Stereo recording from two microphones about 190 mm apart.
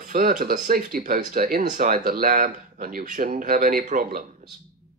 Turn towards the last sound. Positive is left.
turn(degrees=-45)  # may be behind; listen again after turning